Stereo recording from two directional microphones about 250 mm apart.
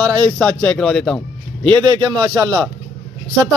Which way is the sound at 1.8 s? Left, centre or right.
Centre.